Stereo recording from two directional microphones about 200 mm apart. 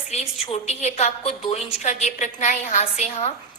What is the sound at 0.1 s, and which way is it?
A woman's voice, 30° left (ahead or behind).